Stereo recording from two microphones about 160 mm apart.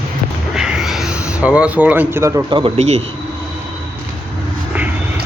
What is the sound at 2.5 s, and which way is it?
Speech, 25° right (ahead or behind).